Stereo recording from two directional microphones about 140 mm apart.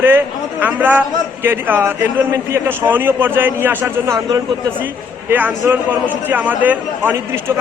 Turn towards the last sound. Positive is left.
turn(degrees=-15)  # may be behind; listen again after turning